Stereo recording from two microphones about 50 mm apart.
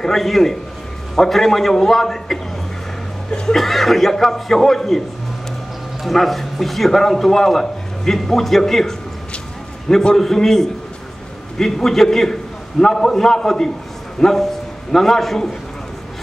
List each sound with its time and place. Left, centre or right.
0.0 s a man's voice: centre
3.5 s a man's voice: centre
6.0 s a man's voice: centre